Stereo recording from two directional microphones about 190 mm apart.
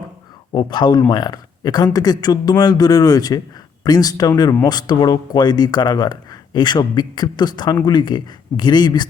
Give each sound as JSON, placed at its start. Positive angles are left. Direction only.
{"t": 0.5, "sound": "speech", "side_deg": 20}